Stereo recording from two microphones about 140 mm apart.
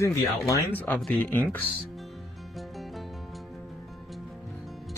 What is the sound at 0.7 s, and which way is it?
Speech, 10° left (ahead or behind).